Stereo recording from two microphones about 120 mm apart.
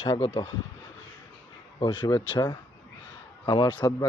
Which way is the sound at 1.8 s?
40° left (ahead or behind).